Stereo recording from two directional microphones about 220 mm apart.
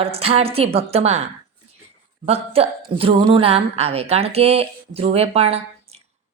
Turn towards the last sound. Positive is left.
turn(degrees=-25)  # may be behind; listen again after turning